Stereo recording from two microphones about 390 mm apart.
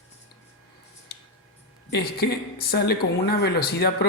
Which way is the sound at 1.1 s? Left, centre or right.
Left.